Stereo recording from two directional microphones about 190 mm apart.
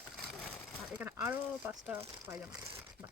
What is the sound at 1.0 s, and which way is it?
Speech, 10° right (ahead or behind).